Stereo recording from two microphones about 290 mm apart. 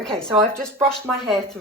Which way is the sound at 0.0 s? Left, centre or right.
Centre.